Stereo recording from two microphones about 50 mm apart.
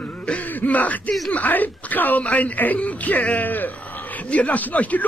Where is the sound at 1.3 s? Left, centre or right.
Left.